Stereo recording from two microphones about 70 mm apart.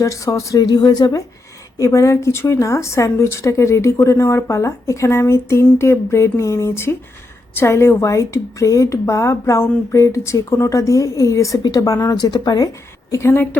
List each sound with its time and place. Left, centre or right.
0.0 s a woman's voice: left
0.6 s a woman's voice: left
1.8 s a woman's voice: left
11.6 s a woman's voice: left